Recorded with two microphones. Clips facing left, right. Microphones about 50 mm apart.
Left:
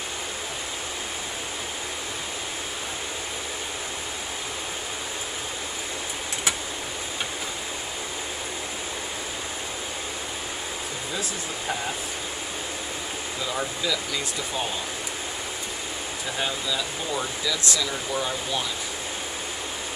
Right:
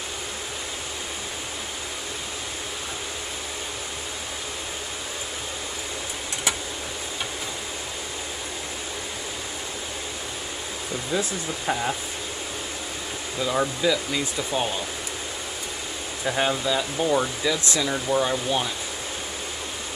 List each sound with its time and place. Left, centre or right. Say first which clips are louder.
11.1 s speech: right 6 dB; centre
13.4 s speech: right 6 dB; centre
16.3 s speech: right 6 dB; right